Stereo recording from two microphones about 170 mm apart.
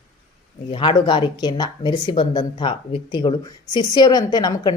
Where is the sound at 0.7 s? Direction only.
30° left (ahead or behind).